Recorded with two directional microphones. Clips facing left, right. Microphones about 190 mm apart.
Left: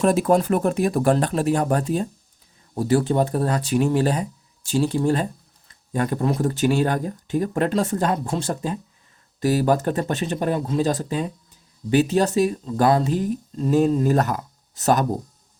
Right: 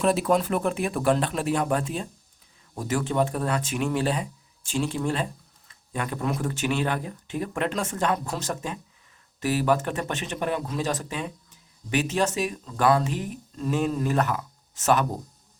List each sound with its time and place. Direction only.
0.0 s speech: 45° left (ahead or behind)